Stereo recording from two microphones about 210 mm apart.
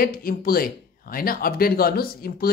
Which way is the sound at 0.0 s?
45° left (ahead or behind).